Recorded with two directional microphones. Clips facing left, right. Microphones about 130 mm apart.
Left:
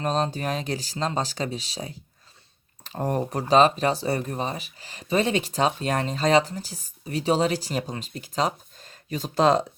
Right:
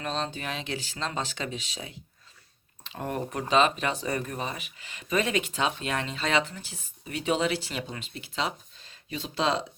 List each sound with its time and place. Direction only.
0.0 s speech: 40° left (ahead or behind)